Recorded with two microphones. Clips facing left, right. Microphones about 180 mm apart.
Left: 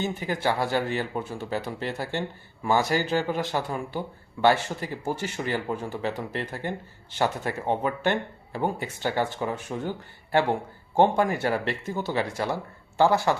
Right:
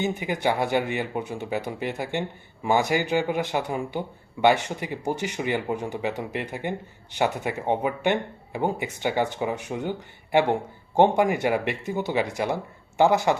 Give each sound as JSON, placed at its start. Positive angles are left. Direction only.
{"t": 0.0, "sound": "a man's voice", "side_deg": -15}